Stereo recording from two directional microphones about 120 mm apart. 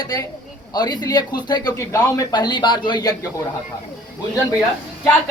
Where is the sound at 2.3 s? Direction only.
40° left (ahead or behind).